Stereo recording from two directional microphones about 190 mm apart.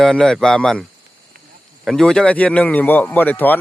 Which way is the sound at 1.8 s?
5° left (ahead or behind).